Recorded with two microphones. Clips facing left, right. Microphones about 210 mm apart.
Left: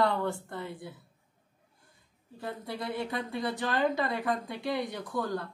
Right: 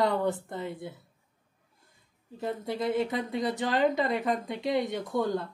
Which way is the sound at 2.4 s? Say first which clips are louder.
Right 6 dB; 20° right (ahead or behind).